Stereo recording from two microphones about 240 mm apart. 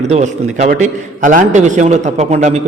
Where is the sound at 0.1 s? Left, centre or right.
Right.